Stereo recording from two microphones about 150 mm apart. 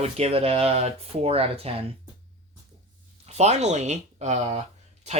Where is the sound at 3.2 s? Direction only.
50° right (ahead or behind).